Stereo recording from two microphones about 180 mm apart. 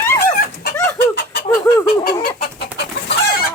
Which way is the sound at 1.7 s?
15° left (ahead or behind).